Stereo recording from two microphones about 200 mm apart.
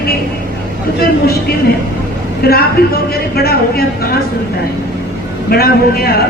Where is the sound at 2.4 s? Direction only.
50° left (ahead or behind).